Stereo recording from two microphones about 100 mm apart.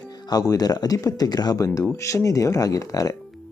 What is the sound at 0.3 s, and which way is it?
Speech, 40° left (ahead or behind).